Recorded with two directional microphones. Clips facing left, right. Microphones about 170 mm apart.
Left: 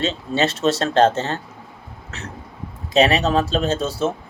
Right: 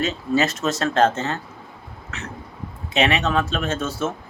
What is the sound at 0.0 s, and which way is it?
Speech, 30° left (ahead or behind).